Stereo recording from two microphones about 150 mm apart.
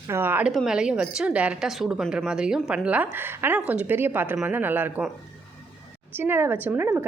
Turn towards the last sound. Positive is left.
turn(degrees=-15)  # may be behind; listen again after turning